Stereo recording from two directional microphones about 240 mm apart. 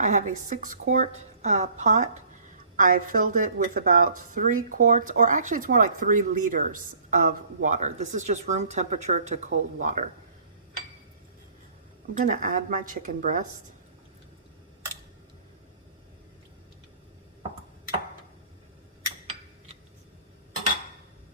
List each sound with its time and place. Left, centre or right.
0.0 s speech: right
12.2 s speech: right